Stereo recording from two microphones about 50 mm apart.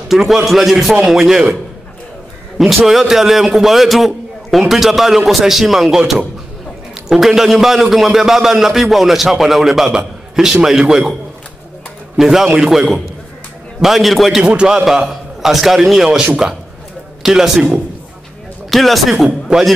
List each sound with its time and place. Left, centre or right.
0.1 s a man's voice: centre
2.9 s a man's voice: centre
12.2 s a man's voice: centre
14.4 s a man's voice: right
14.9 s a man's voice: centre
18.7 s a man's voice: centre